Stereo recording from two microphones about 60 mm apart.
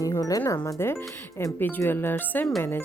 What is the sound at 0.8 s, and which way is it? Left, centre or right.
Speech, left.